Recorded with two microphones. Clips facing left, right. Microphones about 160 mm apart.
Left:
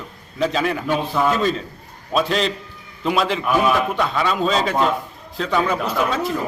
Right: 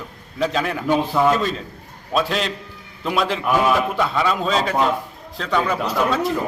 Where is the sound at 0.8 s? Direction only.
20° right (ahead or behind).